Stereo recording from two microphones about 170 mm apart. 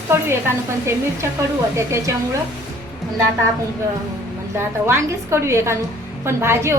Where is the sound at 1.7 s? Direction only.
15° right (ahead or behind).